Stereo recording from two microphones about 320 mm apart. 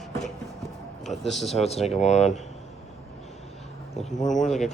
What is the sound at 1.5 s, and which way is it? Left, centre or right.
Speech, centre.